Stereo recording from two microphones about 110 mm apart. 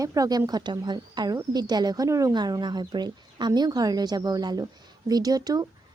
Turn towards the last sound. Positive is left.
turn(degrees=-35)  # may be behind; listen again after turning